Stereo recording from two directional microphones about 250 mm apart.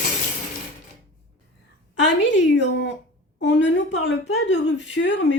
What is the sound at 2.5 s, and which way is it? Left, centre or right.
Speech, left.